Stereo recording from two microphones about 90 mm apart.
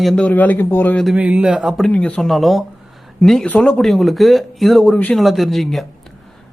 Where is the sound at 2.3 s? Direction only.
Centre (ahead or behind).